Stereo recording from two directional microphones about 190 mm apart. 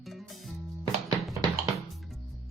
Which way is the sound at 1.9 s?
Centre (ahead or behind).